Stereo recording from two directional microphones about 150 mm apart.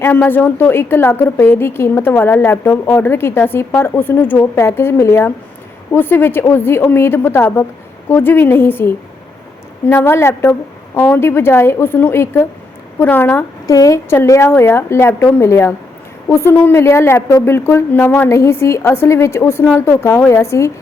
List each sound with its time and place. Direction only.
0.0 s a woman's voice: 10° left (ahead or behind)